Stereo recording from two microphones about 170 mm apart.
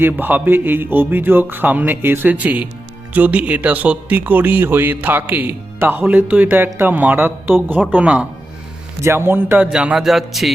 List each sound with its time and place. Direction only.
0.0 s speech: 10° right (ahead or behind)